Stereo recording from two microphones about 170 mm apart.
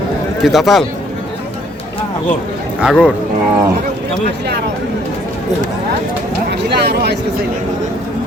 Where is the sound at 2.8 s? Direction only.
5° left (ahead or behind).